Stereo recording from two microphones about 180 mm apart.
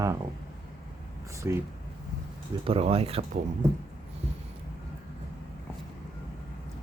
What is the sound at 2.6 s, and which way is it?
Speech, 35° right (ahead or behind).